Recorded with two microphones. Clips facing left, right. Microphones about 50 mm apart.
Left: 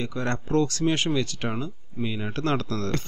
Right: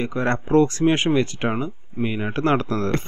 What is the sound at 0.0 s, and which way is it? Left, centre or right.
Speech, right.